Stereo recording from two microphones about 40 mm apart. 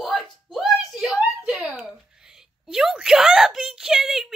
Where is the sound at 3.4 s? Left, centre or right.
Centre.